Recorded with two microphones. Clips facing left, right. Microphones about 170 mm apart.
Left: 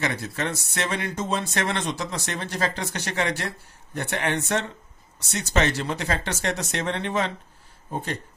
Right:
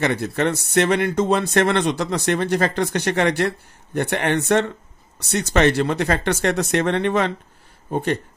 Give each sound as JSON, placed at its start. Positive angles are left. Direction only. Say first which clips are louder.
{"t": 0.0, "sound": "speech", "louder": "right 7 dB", "side_deg": -60}